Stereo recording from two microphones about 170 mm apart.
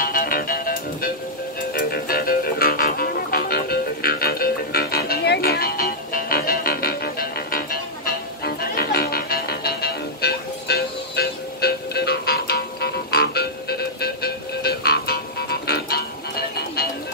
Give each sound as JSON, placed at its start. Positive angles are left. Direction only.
{"t": 0.0, "sound": "music", "side_deg": 55}